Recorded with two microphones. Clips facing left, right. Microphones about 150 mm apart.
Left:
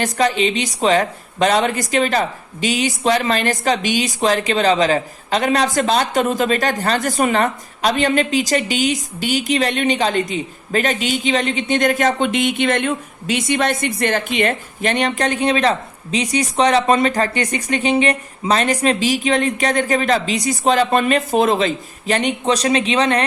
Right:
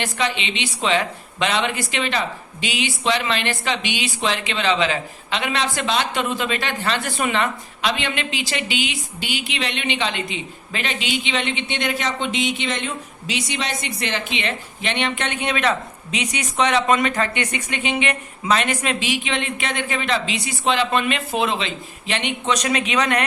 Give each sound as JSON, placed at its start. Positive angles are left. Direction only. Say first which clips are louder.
{"t": 0.0, "sound": "a woman's voice", "louder": "left 7 dB", "side_deg": 40}